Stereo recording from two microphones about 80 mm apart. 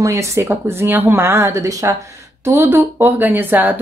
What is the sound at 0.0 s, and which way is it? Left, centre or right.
A woman's voice, right.